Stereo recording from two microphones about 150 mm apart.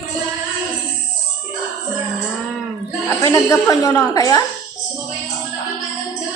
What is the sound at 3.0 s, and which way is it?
A woman's voice, 20° left (ahead or behind).